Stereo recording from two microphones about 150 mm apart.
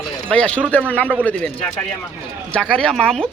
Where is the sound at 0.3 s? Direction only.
5° left (ahead or behind).